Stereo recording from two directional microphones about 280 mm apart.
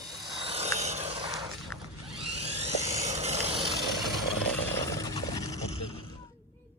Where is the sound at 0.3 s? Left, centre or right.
Centre.